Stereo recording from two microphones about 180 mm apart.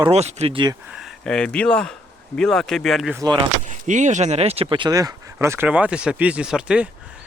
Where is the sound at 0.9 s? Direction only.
Centre (ahead or behind).